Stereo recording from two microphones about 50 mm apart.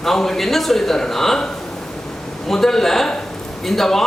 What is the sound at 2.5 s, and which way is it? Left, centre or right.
A man's voice, centre.